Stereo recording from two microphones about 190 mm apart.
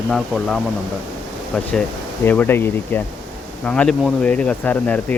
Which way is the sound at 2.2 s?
10° left (ahead or behind).